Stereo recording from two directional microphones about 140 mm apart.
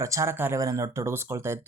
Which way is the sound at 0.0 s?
20° right (ahead or behind).